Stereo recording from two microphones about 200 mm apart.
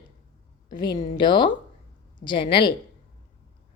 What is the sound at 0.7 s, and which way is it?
A woman's voice, 20° left (ahead or behind).